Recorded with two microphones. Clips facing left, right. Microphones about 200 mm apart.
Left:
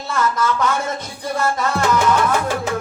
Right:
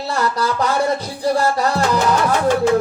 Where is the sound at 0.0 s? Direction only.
35° right (ahead or behind).